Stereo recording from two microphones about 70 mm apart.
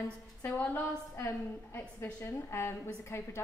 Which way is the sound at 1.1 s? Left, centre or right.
Left.